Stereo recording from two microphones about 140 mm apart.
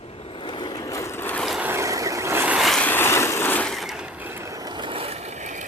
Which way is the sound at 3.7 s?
Centre (ahead or behind).